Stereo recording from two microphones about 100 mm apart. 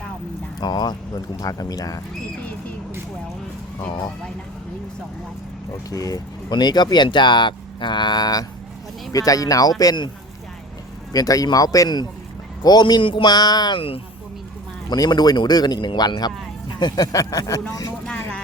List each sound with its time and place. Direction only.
0.6 s speech: 45° left (ahead or behind)
5.9 s speech: 35° left (ahead or behind)
11.1 s speech: 35° left (ahead or behind)
13.0 s speech: 60° left (ahead or behind)
13.2 s speech: 40° left (ahead or behind)
13.7 s speech: 70° left (ahead or behind)
14.8 s speech: 40° left (ahead or behind)